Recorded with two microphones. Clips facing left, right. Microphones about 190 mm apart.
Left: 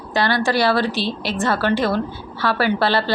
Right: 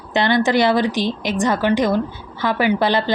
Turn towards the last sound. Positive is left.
turn(degrees=-20)  # may be behind; listen again after turning